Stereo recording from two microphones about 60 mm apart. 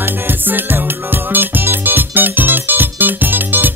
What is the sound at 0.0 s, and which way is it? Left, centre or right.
Music, right.